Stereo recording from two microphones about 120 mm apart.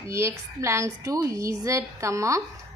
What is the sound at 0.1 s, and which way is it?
A woman's voice, 25° right (ahead or behind).